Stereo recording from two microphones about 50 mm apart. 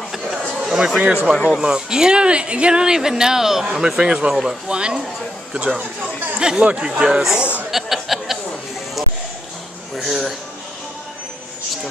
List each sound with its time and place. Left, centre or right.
0.7 s speech: centre
1.0 s a man's voice: right
6.3 s speech: centre
7.7 s a sound: centre
9.9 s speech: centre